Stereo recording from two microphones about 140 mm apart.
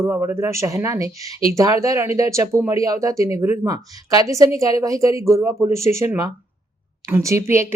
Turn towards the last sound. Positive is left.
turn(degrees=-20)  # may be behind; listen again after turning